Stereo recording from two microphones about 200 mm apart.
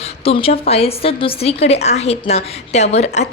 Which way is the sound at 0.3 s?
30° left (ahead or behind).